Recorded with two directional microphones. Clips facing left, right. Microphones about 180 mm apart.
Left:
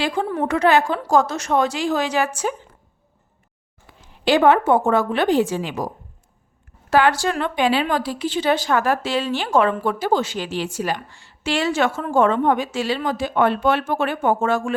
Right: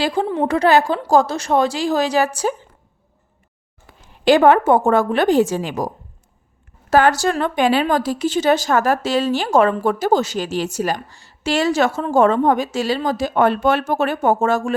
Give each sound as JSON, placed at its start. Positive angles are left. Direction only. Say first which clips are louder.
{"t": 0.0, "sound": "a woman's voice", "louder": "right 3 dB", "side_deg": -35}
{"t": 3.9, "sound": "a sound", "louder": "right 1 dB", "side_deg": -45}
{"t": 4.3, "sound": "a woman's voice", "louder": "right 3 dB", "side_deg": -50}
{"t": 6.9, "sound": "a woman's voice", "louder": "right 3 dB", "side_deg": -40}